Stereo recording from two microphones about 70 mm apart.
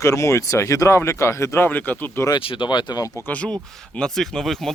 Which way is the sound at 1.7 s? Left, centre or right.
Left.